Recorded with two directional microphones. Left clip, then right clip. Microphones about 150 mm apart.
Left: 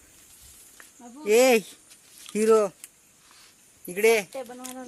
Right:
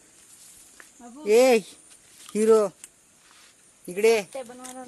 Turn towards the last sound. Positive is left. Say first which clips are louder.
# even
turn(degrees=50)  # may be behind; listen again after turning